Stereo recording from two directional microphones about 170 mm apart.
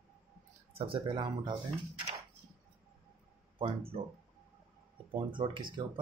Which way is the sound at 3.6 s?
35° right (ahead or behind).